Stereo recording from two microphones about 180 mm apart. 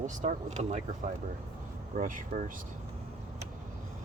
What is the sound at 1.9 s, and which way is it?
Speech, 50° right (ahead or behind).